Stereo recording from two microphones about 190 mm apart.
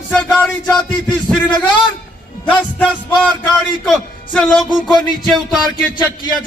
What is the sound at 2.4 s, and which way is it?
A man's voice, 10° left (ahead or behind).